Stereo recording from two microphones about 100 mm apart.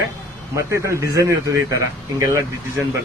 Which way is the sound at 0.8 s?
30° right (ahead or behind).